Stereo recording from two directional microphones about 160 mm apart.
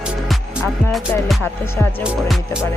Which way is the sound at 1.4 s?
15° left (ahead or behind).